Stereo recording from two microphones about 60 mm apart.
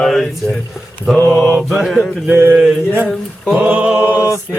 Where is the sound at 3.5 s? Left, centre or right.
Right.